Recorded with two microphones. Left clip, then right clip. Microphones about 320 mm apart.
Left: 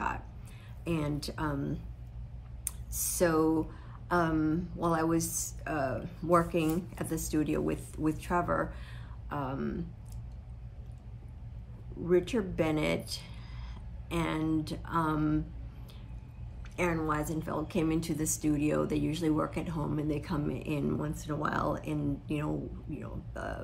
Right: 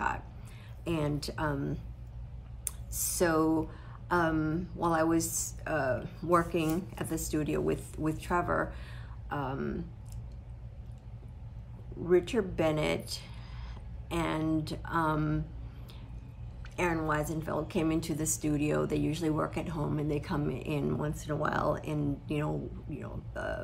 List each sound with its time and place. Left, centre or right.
0.8 s speech: centre
12.1 s speech: centre
16.7 s speech: centre